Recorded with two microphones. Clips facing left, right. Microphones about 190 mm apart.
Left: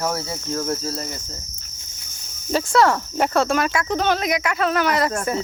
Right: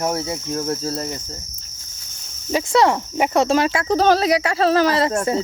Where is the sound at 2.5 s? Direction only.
20° right (ahead or behind).